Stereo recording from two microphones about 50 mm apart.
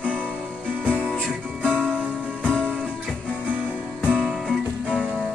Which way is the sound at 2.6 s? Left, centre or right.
Centre.